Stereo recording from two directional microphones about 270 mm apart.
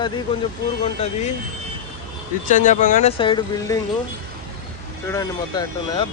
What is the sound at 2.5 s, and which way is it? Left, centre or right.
Speech, left.